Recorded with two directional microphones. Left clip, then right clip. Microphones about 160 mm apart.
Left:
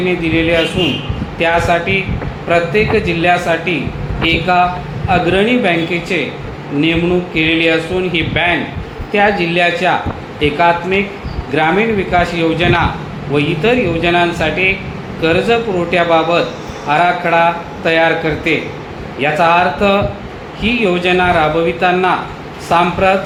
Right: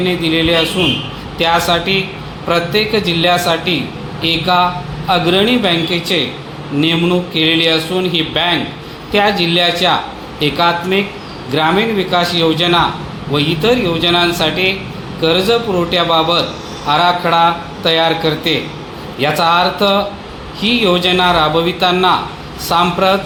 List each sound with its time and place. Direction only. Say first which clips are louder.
0.3 s speech: right 1 dB; 35° right (ahead or behind)
7.3 s speech: even; 35° right (ahead or behind)